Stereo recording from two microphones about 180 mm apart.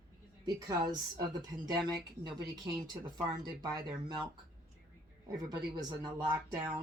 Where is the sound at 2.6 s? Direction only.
25° right (ahead or behind).